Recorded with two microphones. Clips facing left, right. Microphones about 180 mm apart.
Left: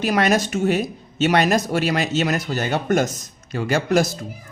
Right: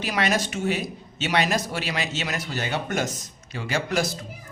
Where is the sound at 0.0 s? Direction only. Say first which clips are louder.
Left 6 dB; 45° left (ahead or behind).